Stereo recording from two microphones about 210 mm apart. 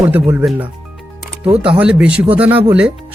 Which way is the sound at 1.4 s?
25° right (ahead or behind).